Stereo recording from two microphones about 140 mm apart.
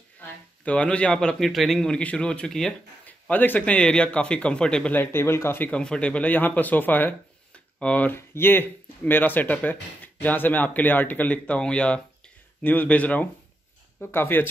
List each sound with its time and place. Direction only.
0.7 s a man's voice: 10° left (ahead or behind)